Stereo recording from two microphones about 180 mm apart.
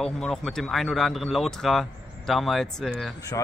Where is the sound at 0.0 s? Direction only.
Centre (ahead or behind).